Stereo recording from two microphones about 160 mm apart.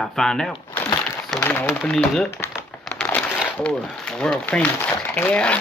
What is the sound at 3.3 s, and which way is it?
Speech, 5° left (ahead or behind).